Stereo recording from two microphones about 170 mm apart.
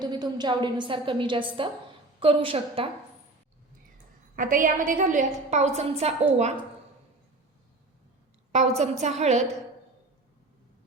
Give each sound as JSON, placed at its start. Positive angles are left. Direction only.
{"t": 0.0, "sound": "a woman's voice", "side_deg": -25}
{"t": 3.9, "sound": "a woman's voice", "side_deg": -55}
{"t": 8.5, "sound": "a woman's voice", "side_deg": -40}